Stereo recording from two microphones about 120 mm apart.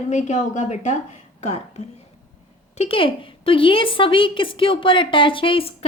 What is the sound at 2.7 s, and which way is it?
A woman's voice, 55° left (ahead or behind).